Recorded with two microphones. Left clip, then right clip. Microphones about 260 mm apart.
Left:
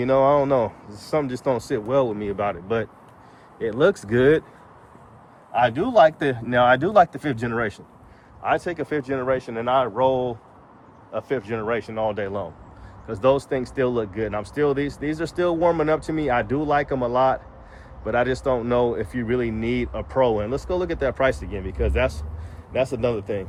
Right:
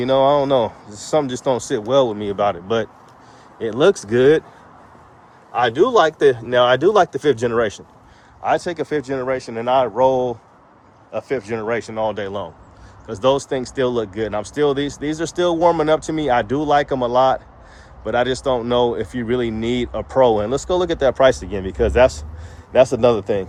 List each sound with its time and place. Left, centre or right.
0.0 s speech: centre
5.5 s a man's voice: centre